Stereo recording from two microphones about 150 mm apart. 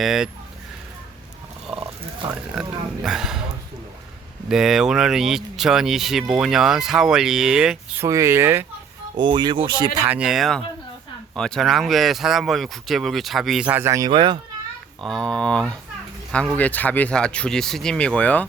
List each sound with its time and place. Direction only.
0.0 s speech: 5° right (ahead or behind)
2.6 s speech: 5° right (ahead or behind)
4.4 s speech: 5° right (ahead or behind)
8.0 s speech: 20° right (ahead or behind)
9.1 s speech: 30° right (ahead or behind)
10.1 s speech: 5° right (ahead or behind); by 14.3 s 30° right (ahead or behind)
15.0 s speech: 5° left (ahead or behind)